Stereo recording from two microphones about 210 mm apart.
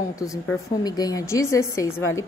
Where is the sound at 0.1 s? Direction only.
15° left (ahead or behind).